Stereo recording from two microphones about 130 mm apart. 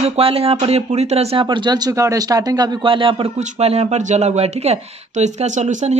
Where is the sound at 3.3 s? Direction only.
50° right (ahead or behind).